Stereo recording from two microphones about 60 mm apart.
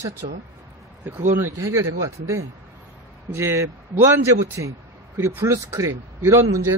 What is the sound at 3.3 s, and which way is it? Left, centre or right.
A man's voice, right.